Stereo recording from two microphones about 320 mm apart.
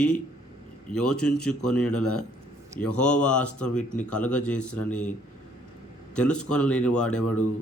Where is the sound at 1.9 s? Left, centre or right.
Left.